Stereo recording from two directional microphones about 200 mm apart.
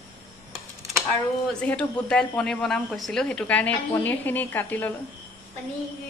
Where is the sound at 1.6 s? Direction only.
5° left (ahead or behind).